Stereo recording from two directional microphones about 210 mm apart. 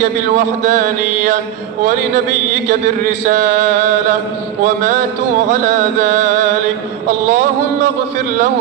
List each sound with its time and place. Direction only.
0.0 s mantra: 40° right (ahead or behind)
2.7 s mantra: 35° right (ahead or behind)
6.0 s mantra: 35° right (ahead or behind)